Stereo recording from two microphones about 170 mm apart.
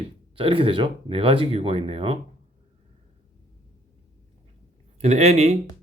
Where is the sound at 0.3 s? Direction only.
30° right (ahead or behind).